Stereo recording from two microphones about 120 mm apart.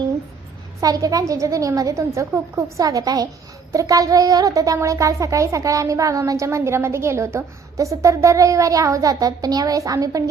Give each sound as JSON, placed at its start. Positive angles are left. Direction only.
{"t": 0.8, "sound": "a child's voice", "side_deg": -30}